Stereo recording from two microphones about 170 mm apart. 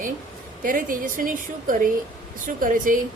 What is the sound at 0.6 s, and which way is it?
A woman's voice, 55° right (ahead or behind).